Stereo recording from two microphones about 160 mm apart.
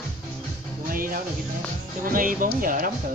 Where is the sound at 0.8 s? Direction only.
60° right (ahead or behind).